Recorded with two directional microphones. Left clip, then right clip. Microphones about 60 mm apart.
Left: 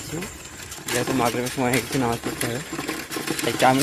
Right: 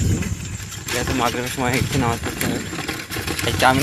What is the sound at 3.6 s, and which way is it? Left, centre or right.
Speech, centre.